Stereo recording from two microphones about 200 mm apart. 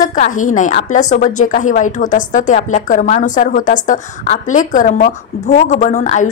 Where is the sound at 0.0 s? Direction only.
40° left (ahead or behind).